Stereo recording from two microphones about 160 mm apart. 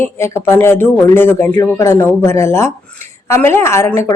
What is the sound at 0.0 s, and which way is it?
A woman's voice, 15° left (ahead or behind).